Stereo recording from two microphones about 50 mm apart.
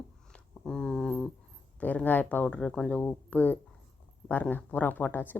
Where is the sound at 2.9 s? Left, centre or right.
Left.